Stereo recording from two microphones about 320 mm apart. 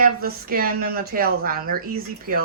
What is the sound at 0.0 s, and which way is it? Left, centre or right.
Speech, right.